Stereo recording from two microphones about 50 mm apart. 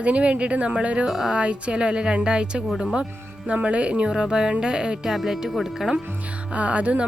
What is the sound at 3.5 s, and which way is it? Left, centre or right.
Speech, right.